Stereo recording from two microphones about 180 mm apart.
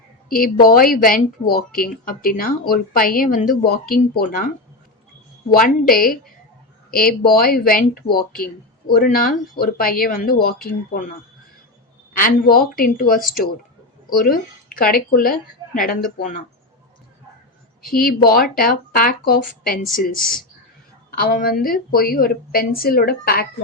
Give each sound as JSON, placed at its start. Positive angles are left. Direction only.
{"t": 0.3, "sound": "speech", "side_deg": 50}
{"t": 5.5, "sound": "a woman's voice", "side_deg": 55}
{"t": 12.1, "sound": "speech", "side_deg": 55}
{"t": 14.3, "sound": "speech", "side_deg": 55}
{"t": 17.8, "sound": "a woman's voice", "side_deg": 55}